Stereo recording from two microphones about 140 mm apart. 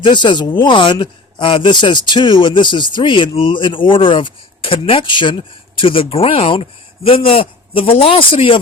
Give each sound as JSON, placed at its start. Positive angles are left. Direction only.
{"t": 0.0, "sound": "speech", "side_deg": 35}